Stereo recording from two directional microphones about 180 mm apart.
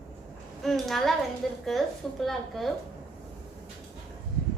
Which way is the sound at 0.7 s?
Centre (ahead or behind).